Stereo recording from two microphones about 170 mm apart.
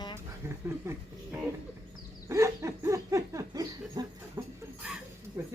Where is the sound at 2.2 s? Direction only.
15° right (ahead or behind).